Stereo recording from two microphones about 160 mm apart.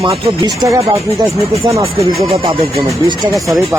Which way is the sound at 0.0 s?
30° right (ahead or behind).